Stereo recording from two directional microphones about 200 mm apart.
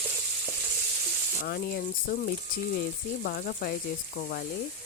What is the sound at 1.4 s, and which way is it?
Speech, 50° left (ahead or behind).